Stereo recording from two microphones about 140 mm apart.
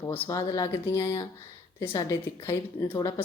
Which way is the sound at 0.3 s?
25° left (ahead or behind).